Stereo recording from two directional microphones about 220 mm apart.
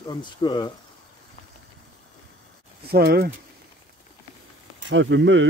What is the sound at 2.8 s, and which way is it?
Speech, 45° right (ahead or behind).